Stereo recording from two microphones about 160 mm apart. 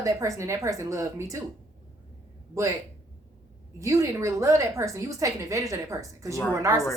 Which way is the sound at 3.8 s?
20° right (ahead or behind).